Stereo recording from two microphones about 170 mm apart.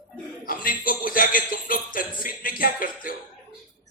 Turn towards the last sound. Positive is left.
turn(degrees=55)  # may be behind; listen again after turning